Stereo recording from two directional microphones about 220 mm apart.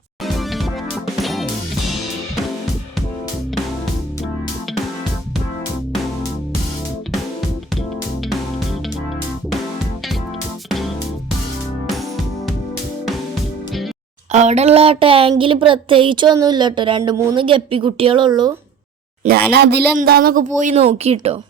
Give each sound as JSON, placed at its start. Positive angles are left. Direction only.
{"t": 0.3, "sound": "music", "side_deg": 0}
{"t": 14.3, "sound": "a woman's voice", "side_deg": -30}
{"t": 19.5, "sound": "speech", "side_deg": -50}